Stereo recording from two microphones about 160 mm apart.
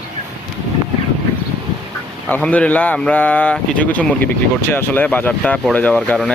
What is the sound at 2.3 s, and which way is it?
Speech, 10° left (ahead or behind).